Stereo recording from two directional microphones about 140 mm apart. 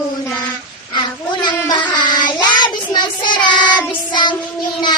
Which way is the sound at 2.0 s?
30° left (ahead or behind).